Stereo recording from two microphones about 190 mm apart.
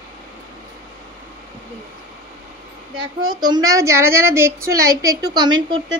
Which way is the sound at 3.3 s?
20° right (ahead or behind).